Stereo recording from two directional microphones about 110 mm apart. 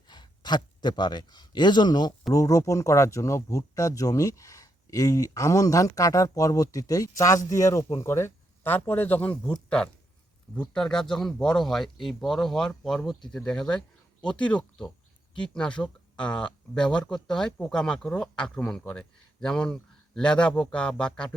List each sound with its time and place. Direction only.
0.1 s a man's voice: 40° left (ahead or behind)
2.3 s speech: 30° left (ahead or behind); by 21.2 s 10° left (ahead or behind)